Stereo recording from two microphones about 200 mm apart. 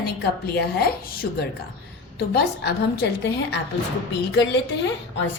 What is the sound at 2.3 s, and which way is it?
A woman's voice, 55° left (ahead or behind).